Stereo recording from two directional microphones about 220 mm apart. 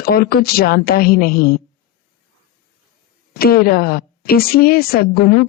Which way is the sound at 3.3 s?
45° left (ahead or behind).